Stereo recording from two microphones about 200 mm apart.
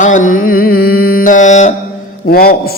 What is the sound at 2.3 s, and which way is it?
Speech, 50° left (ahead or behind).